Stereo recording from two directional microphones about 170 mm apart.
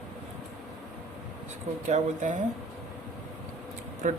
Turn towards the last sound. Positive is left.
turn(degrees=-50)  # may be behind; listen again after turning